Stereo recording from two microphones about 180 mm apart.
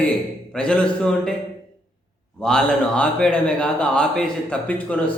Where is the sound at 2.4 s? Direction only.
5° left (ahead or behind).